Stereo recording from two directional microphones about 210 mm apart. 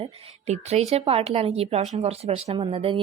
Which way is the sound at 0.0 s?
30° right (ahead or behind).